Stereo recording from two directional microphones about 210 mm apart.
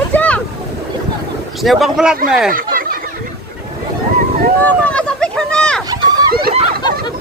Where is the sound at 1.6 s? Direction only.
Centre (ahead or behind).